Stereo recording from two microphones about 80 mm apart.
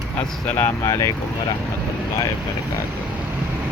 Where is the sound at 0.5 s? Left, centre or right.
Left.